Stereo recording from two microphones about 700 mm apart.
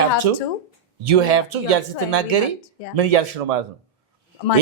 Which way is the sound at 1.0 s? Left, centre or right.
Right.